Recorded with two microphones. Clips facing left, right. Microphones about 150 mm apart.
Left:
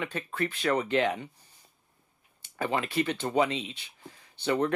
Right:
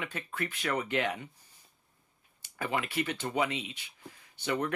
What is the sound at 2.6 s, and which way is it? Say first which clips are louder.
Speech: left 4 dB; 30° left (ahead or behind).